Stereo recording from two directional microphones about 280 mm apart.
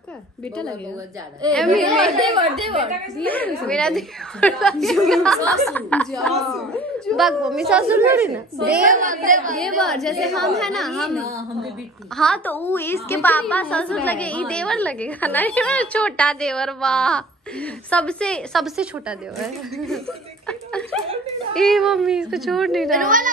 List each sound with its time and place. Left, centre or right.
1.5 s a woman's voice: centre
8.5 s a woman's voice: right
9.6 s a woman's voice: centre
11.1 s a woman's voice: centre
12.2 s a woman's voice: centre
23.0 s a woman's voice: right